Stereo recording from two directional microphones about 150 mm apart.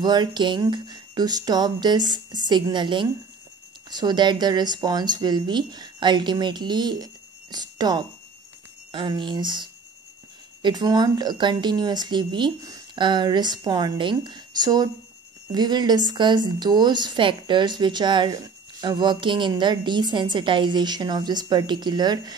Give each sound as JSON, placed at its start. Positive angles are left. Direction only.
{"t": 0.0, "sound": "speech", "side_deg": -30}